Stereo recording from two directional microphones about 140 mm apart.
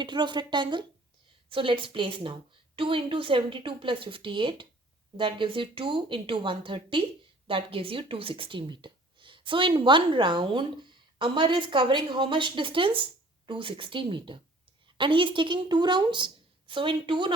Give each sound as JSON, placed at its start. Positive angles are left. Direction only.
{"t": 0.0, "sound": "speech", "side_deg": -35}